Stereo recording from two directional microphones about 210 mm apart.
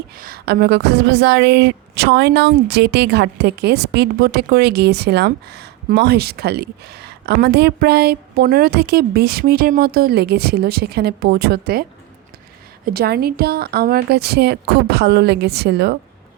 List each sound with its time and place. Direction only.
0.2 s speech: 45° right (ahead or behind)